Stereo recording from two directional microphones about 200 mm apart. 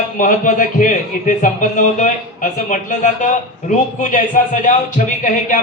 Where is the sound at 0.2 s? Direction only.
40° left (ahead or behind).